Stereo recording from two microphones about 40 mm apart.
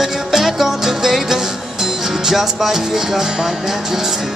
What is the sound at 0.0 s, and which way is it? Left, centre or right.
Music, centre.